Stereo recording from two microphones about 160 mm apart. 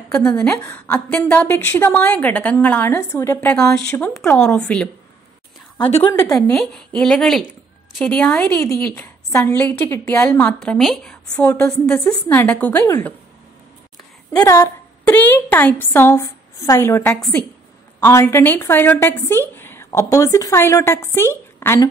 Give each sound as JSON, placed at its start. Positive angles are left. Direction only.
{"t": 0.1, "sound": "a woman's voice", "side_deg": 10}
{"t": 5.8, "sound": "a woman's voice", "side_deg": 40}
{"t": 6.5, "sound": "a woman's voice", "side_deg": 5}
{"t": 8.5, "sound": "a woman's voice", "side_deg": 20}
{"t": 14.4, "sound": "a woman's voice", "side_deg": 20}